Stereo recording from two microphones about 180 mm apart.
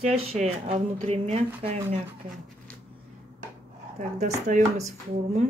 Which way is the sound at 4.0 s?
40° right (ahead or behind).